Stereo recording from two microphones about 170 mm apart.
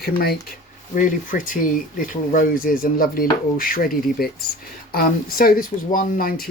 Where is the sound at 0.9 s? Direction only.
50° left (ahead or behind).